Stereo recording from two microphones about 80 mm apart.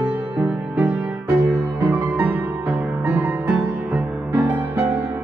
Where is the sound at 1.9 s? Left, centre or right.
Right.